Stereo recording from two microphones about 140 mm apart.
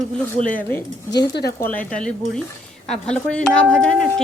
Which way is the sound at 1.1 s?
30° left (ahead or behind).